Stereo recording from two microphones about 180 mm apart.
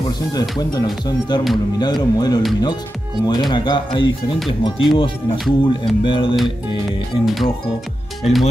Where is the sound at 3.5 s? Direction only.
25° left (ahead or behind).